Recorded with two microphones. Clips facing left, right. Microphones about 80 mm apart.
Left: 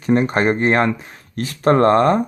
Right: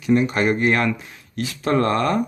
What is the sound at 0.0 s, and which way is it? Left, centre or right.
Speech, left.